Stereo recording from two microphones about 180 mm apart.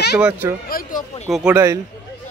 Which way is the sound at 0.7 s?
55° left (ahead or behind).